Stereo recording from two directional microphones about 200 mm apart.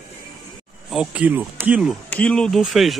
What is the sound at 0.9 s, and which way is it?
Speech, 5° right (ahead or behind).